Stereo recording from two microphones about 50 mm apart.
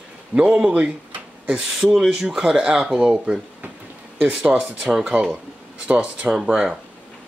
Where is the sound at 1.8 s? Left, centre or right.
Centre.